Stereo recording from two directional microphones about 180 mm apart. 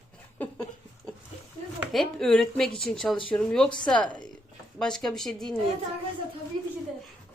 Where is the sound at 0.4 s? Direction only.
10° left (ahead or behind).